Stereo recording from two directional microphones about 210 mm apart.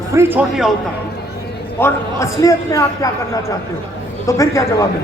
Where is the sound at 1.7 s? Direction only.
15° left (ahead or behind).